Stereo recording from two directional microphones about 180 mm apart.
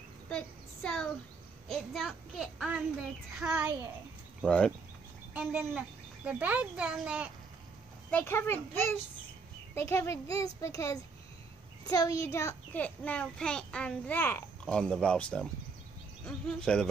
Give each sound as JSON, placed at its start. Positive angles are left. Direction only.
{"t": 0.3, "sound": "a child's voice", "side_deg": 5}
{"t": 4.4, "sound": "a child's voice", "side_deg": 5}
{"t": 5.3, "sound": "speech", "side_deg": -10}
{"t": 8.1, "sound": "a child's voice", "side_deg": 10}